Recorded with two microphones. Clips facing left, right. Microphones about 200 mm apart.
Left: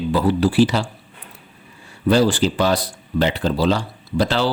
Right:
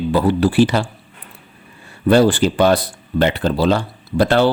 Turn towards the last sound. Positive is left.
turn(degrees=-55)  # may be behind; listen again after turning